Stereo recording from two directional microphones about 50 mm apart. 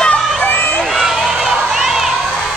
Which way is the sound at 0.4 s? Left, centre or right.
Left.